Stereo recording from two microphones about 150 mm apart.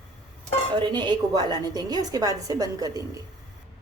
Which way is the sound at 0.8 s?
30° right (ahead or behind).